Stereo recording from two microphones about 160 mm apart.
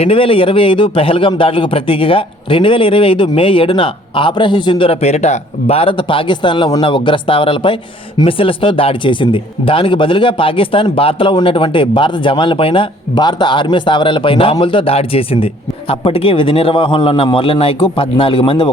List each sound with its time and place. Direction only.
0.0 s speech: 35° left (ahead or behind)